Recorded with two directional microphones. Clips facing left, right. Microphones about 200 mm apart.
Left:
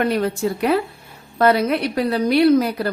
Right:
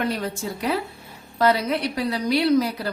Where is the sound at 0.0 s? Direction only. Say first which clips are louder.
Left 7 dB; 60° left (ahead or behind).